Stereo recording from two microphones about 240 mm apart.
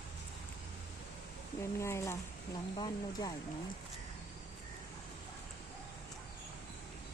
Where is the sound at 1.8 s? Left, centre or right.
Centre.